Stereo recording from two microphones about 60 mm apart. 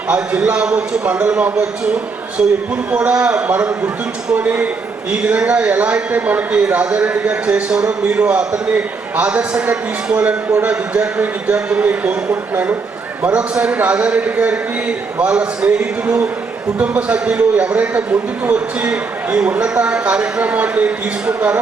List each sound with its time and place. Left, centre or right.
0.1 s a man's voice: centre